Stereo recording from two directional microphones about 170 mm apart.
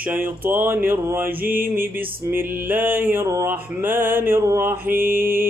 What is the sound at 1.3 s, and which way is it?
Mantra, 55° right (ahead or behind).